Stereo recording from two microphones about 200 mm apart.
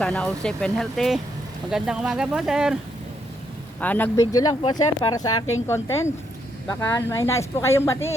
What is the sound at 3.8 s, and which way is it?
Speech, 10° left (ahead or behind).